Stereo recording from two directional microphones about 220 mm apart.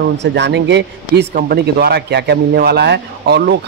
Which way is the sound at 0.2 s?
50° right (ahead or behind).